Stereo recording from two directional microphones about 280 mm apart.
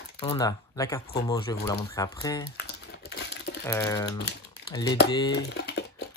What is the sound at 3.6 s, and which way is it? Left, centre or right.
Speech, centre.